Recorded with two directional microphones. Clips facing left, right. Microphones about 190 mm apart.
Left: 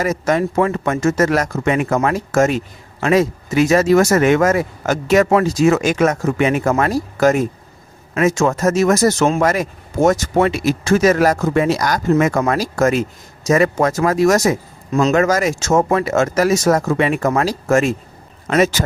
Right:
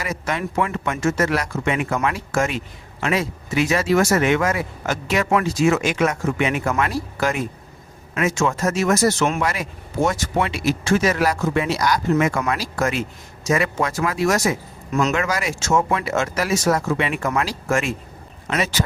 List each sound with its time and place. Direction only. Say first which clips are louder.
0.0 s speech: left 9 dB; 45° left (ahead or behind)